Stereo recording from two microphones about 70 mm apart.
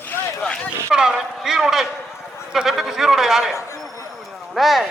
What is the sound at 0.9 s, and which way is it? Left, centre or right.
A man's voice, centre.